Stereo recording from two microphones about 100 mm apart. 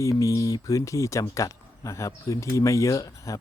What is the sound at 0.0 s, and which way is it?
Speech, 30° left (ahead or behind).